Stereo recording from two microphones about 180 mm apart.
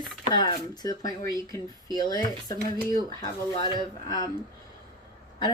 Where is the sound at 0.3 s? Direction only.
25° left (ahead or behind).